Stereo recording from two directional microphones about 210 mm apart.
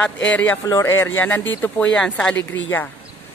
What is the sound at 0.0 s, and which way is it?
A man's voice, 5° left (ahead or behind).